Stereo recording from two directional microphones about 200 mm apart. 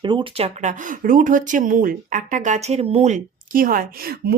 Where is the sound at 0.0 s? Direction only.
25° right (ahead or behind).